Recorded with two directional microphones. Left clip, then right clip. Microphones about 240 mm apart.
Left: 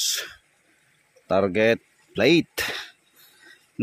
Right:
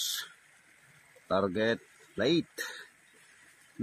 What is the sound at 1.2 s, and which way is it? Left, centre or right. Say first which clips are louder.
Speech: left 9 dB; left.